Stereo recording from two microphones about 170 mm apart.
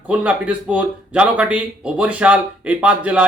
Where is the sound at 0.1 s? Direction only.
10° right (ahead or behind).